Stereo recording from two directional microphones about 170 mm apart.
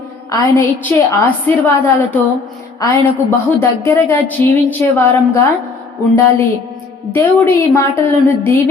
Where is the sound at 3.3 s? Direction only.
15° left (ahead or behind).